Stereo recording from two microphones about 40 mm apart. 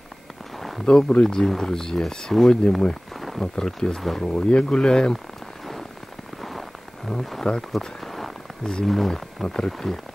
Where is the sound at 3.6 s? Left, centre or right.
Centre.